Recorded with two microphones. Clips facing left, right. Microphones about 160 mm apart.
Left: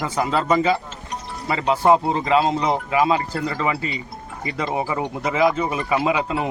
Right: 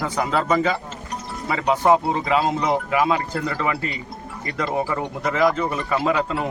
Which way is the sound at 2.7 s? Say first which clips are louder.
Left 1 dB; 20° left (ahead or behind).